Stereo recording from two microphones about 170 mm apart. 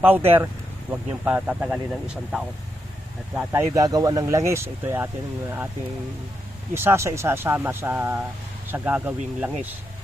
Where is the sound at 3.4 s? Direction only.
15° right (ahead or behind).